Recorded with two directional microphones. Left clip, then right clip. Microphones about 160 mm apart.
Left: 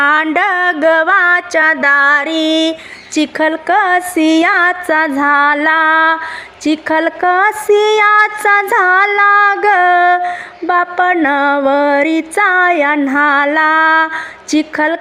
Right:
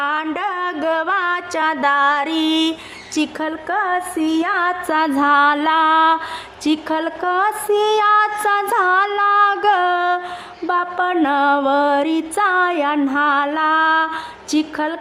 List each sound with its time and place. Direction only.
0.0 s a woman's voice: 25° left (ahead or behind); by 2.7 s 5° left (ahead or behind)
3.2 s female singing: 20° left (ahead or behind)
4.9 s a woman's voice: 10° left (ahead or behind)
13.1 s female singing: 20° left (ahead or behind)